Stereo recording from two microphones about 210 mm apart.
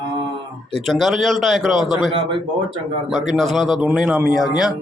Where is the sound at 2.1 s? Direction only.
25° right (ahead or behind).